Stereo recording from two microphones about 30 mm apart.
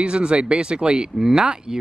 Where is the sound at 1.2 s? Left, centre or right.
Right.